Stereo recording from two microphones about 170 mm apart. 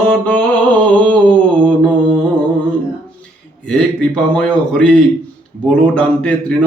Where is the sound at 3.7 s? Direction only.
5° left (ahead or behind).